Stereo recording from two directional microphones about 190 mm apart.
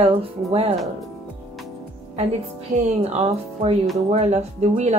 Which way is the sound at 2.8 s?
35° right (ahead or behind).